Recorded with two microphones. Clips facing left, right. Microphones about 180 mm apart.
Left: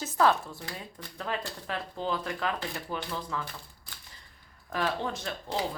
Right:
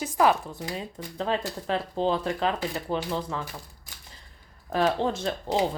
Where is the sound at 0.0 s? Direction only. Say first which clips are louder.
Right 3 dB; 15° right (ahead or behind).